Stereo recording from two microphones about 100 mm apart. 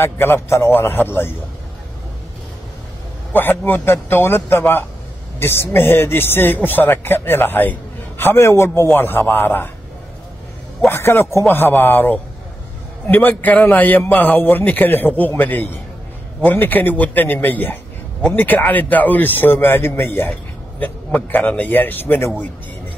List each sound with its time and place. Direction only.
0.0 s speech: 25° left (ahead or behind)
3.3 s speech: 20° left (ahead or behind)
10.9 s a man's voice: 25° left (ahead or behind)